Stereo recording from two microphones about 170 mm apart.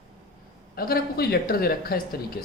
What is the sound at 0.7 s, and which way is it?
Speech, 65° left (ahead or behind).